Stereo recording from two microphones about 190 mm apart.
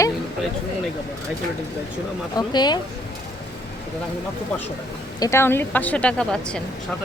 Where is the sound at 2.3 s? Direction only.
20° left (ahead or behind).